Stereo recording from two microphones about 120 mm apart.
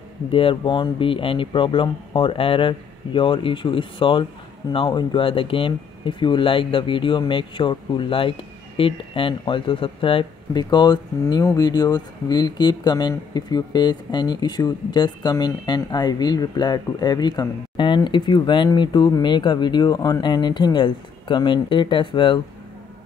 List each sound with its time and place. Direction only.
0.3 s speech: 50° left (ahead or behind)